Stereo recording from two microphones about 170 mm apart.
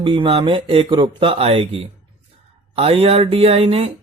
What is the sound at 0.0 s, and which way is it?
Speech, 30° right (ahead or behind).